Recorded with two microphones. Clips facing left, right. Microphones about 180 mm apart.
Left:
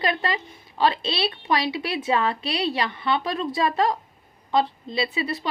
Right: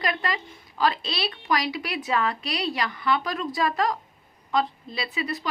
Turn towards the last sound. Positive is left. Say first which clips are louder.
# left 3 dB
turn(degrees=30)  # may be behind; listen again after turning